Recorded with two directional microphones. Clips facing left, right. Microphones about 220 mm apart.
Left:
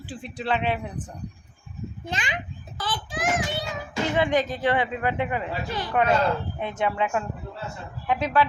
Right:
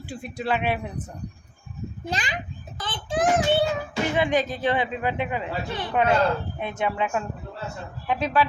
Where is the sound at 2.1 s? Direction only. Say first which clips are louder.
Right 2 dB; 35° right (ahead or behind).